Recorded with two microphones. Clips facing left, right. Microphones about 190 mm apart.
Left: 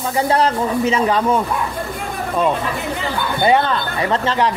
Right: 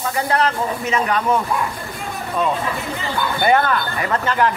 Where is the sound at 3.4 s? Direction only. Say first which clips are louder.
Left 1 dB; 25° left (ahead or behind).